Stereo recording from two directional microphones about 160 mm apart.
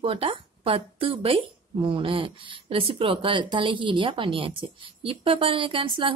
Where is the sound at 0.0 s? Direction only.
35° right (ahead or behind).